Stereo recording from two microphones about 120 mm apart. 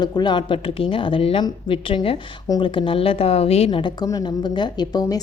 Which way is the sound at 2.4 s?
40° left (ahead or behind).